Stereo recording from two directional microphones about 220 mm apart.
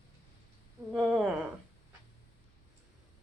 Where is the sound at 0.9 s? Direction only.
5° right (ahead or behind).